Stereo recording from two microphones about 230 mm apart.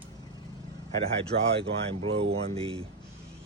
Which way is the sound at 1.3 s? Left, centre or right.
Right.